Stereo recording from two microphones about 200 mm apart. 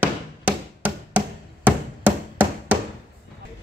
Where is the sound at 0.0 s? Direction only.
10° right (ahead or behind).